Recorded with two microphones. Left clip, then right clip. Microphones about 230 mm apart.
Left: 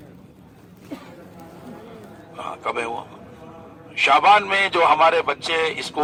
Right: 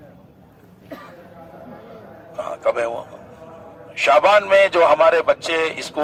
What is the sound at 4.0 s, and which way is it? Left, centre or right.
A man's voice, right.